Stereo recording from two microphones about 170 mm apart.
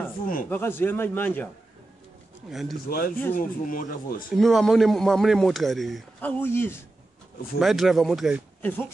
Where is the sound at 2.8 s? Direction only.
60° left (ahead or behind).